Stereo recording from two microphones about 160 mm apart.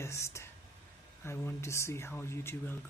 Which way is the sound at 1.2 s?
15° left (ahead or behind).